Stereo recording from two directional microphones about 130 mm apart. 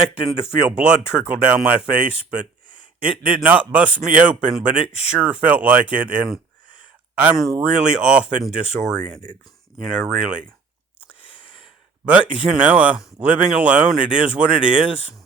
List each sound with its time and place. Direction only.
0.8 s speech: 10° right (ahead or behind)
11.1 s a sound: 10° right (ahead or behind)
12.3 s speech: 10° right (ahead or behind)